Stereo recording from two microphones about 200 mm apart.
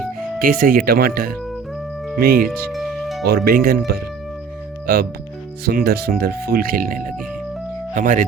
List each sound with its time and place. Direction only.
0.3 s speech: 45° right (ahead or behind)
2.5 s music: centre (ahead or behind)
3.2 s speech: 50° right (ahead or behind)